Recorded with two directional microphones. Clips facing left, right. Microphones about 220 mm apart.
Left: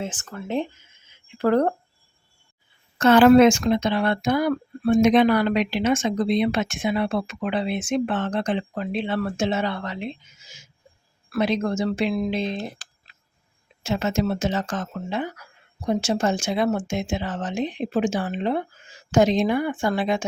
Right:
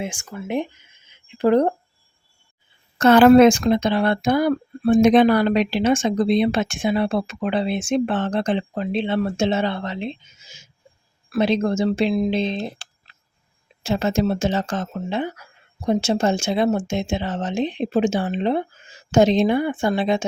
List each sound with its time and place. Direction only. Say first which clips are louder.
0.0 s speech: right 2 dB; 10° right (ahead or behind)
3.0 s speech: right 2 dB; 40° right (ahead or behind); by 20.2 s 25° right (ahead or behind)